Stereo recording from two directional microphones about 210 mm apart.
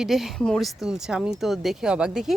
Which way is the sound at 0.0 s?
Centre (ahead or behind).